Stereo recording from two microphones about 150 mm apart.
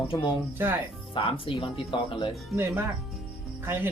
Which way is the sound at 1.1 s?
35° left (ahead or behind).